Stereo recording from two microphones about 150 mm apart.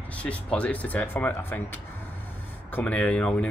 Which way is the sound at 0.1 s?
10° left (ahead or behind).